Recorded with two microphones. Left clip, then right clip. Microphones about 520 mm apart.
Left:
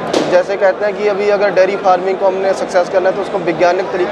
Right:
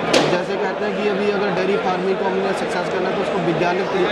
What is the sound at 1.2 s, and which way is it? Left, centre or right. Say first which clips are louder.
Speech: left 8 dB; left.